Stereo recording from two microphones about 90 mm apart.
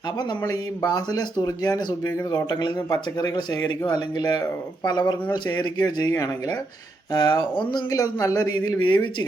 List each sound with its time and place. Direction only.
0.4 s speech: 45° left (ahead or behind)
5.5 s speech: 20° left (ahead or behind)
6.0 s speech: 40° left (ahead or behind)
7.1 s speech: 50° left (ahead or behind)
7.9 s speech: 40° left (ahead or behind)